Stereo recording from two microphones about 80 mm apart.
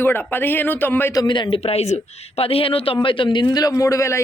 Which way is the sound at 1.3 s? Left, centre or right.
Left.